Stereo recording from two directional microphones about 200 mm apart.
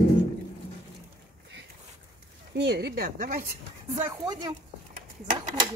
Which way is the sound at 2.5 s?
55° right (ahead or behind).